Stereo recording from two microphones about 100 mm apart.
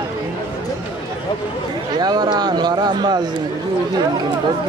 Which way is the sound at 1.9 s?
45° right (ahead or behind).